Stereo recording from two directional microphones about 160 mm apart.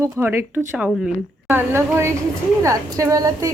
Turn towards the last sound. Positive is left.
turn(degrees=-20)  # may be behind; listen again after turning